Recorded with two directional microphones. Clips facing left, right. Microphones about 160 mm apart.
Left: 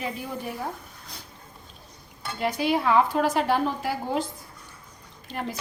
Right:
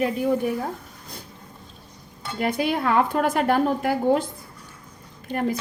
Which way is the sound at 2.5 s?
55° right (ahead or behind).